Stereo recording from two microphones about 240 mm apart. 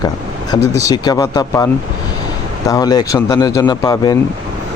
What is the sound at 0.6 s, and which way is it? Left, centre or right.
Speech, right.